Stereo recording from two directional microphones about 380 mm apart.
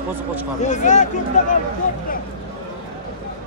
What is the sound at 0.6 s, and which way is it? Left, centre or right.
Speech, centre.